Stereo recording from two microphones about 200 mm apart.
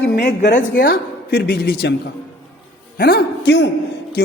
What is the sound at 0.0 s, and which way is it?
Speech, 60° left (ahead or behind).